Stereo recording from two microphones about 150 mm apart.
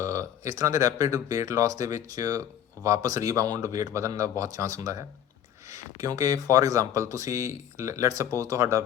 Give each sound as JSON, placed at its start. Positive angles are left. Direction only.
{"t": 0.0, "sound": "speech", "side_deg": -20}